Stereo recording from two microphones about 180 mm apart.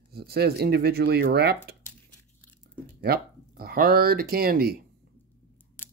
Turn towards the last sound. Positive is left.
turn(degrees=-55)  # may be behind; listen again after turning